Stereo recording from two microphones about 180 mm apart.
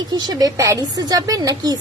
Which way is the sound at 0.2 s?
20° right (ahead or behind).